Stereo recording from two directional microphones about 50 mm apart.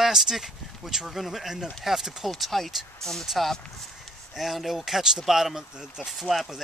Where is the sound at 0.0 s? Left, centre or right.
Centre.